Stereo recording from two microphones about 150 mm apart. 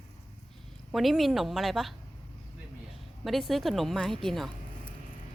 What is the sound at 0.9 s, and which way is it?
Speech, centre (ahead or behind).